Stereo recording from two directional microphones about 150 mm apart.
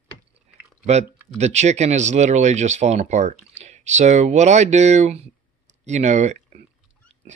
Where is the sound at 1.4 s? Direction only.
50° right (ahead or behind).